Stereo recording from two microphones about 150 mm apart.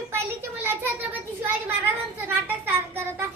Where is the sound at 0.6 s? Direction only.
15° right (ahead or behind).